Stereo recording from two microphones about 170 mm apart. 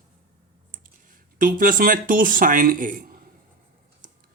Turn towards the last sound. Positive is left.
turn(degrees=-55)  # may be behind; listen again after turning